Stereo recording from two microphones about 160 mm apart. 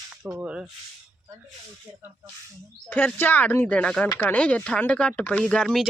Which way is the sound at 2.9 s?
10° left (ahead or behind).